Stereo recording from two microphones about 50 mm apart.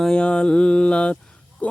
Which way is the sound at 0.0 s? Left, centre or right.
Centre.